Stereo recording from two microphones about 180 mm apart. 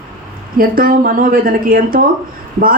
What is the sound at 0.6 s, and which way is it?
Speech, 50° right (ahead or behind).